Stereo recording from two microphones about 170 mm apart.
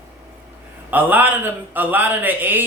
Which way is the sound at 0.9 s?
10° right (ahead or behind).